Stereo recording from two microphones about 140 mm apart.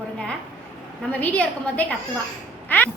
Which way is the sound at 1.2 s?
10° left (ahead or behind).